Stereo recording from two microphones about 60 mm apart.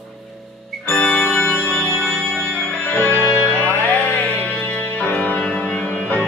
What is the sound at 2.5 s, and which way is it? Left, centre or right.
Music, left.